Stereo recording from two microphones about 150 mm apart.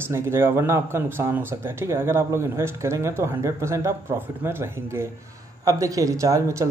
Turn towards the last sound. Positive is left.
turn(degrees=-20)  # may be behind; listen again after turning